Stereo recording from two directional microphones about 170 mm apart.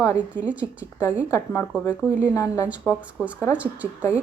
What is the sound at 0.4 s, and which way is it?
Speech, 10° right (ahead or behind).